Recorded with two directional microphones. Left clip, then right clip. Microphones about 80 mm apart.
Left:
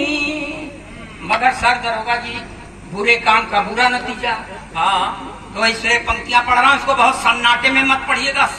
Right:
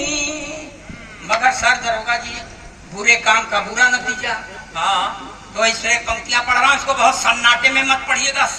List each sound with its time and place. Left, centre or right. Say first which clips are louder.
0.0 s female singing: left 3 dB; right
1.3 s a man's voice: even; right